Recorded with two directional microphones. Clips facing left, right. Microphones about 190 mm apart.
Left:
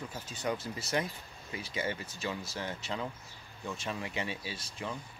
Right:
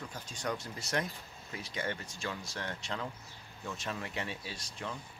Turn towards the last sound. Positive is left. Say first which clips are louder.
# left 2 dB
turn(degrees=0)  # may be behind; listen again after turning